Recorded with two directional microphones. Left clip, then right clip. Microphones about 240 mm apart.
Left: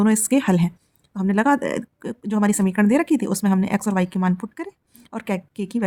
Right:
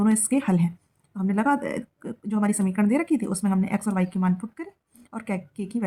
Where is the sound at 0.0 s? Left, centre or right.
Left.